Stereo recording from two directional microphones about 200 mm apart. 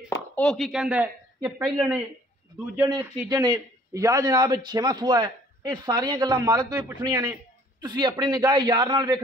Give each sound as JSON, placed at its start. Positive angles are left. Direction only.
{"t": 0.1, "sound": "speech", "side_deg": 5}
{"t": 2.8, "sound": "a man's voice", "side_deg": -20}